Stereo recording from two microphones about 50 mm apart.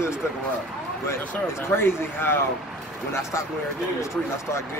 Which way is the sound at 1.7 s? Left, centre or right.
Left.